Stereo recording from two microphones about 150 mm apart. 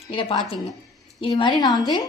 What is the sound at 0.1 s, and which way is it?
A woman's voice, 40° left (ahead or behind).